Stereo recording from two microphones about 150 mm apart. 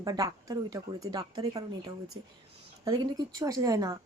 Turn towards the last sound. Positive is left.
turn(degrees=-25)  # may be behind; listen again after turning